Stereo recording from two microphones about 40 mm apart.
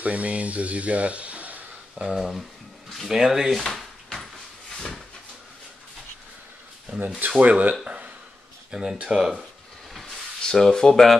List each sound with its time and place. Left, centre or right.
0.0 s speech: right
2.0 s speech: centre
3.7 s drawer open or close: centre
4.7 s a sound: centre
7.2 s speech: right
7.8 s speech: right
9.9 s a sound: centre
10.4 s speech: centre